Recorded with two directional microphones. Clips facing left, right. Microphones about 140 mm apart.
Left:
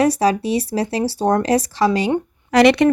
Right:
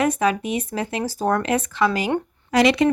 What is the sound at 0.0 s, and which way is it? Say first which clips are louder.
Speech: left 4 dB; 35° left (ahead or behind).